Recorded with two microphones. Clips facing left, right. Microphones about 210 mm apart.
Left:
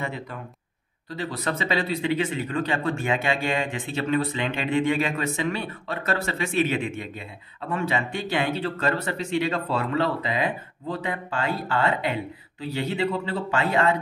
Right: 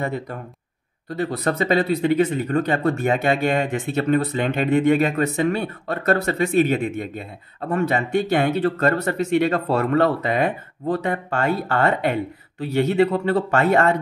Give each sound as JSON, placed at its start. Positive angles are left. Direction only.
{"t": 0.0, "sound": "speech", "side_deg": -45}